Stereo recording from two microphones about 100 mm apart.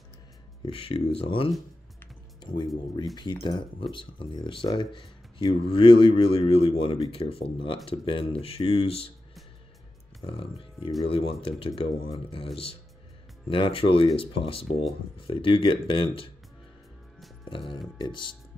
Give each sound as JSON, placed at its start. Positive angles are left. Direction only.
{"t": 0.7, "sound": "speech", "side_deg": 60}
{"t": 2.4, "sound": "speech", "side_deg": 50}
{"t": 3.9, "sound": "speech", "side_deg": 55}
{"t": 10.2, "sound": "speech", "side_deg": 65}
{"t": 13.5, "sound": "speech", "side_deg": 60}
{"t": 17.5, "sound": "speech", "side_deg": 60}